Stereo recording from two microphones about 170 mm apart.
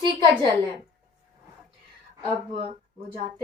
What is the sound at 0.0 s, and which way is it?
Speech, 30° right (ahead or behind).